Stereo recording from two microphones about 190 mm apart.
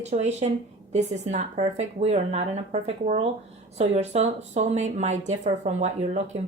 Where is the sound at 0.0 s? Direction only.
35° right (ahead or behind).